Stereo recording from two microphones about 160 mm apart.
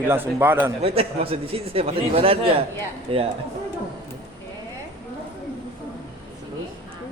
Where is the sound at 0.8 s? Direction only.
35° right (ahead or behind).